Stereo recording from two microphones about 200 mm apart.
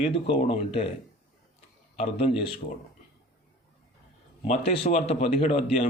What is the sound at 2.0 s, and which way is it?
Speech, 30° left (ahead or behind).